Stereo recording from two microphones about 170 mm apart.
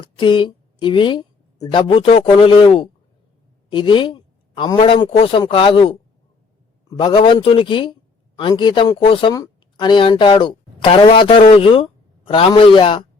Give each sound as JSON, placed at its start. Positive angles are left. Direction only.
{"t": 0.0, "sound": "speech", "side_deg": 30}
{"t": 7.0, "sound": "speech", "side_deg": 30}